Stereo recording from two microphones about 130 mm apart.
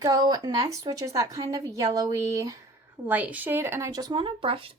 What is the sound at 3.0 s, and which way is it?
Speech, 10° right (ahead or behind).